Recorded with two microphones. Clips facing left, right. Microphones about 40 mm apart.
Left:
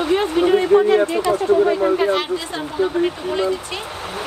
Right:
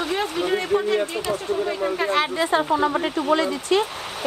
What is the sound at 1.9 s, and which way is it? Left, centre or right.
Speech, centre.